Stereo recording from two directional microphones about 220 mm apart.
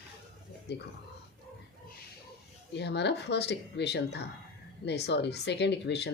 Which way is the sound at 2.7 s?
50° left (ahead or behind).